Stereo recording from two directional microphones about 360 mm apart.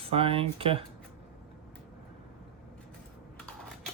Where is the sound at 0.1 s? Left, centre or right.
Centre.